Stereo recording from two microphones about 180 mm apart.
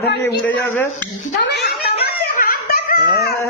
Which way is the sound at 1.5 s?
65° left (ahead or behind).